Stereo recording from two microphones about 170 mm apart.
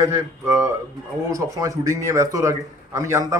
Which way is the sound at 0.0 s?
15° right (ahead or behind).